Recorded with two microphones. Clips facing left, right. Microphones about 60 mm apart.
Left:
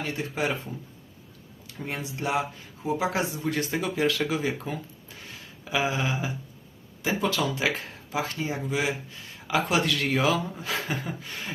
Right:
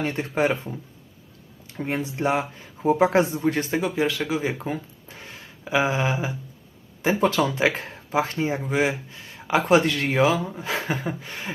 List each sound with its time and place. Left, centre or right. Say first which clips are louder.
0.0 s speech: right 6 dB; right
3.8 s speech: right 2 dB; centre